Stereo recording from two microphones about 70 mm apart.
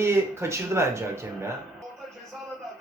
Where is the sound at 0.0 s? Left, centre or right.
Right.